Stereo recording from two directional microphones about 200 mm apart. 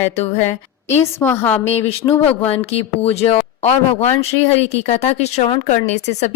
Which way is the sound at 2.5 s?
30° left (ahead or behind).